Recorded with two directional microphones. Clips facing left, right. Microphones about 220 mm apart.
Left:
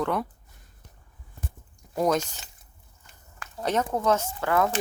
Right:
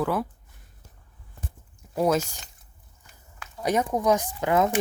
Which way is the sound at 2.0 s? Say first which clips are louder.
Right 1 dB; 5° right (ahead or behind).